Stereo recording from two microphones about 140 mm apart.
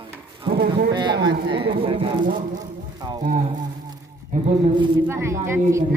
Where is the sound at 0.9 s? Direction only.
35° right (ahead or behind).